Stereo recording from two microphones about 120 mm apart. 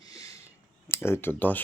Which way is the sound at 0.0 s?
30° left (ahead or behind).